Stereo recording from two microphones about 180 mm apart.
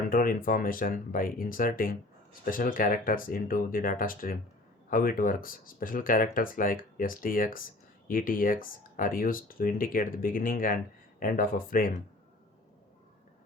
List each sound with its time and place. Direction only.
0.1 s speech: 50° left (ahead or behind)